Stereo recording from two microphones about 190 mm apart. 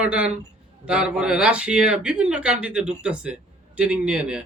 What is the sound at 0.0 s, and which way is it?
Speech, 5° right (ahead or behind).